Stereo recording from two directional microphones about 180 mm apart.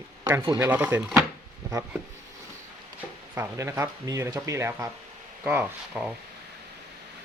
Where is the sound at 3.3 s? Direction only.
15° right (ahead or behind).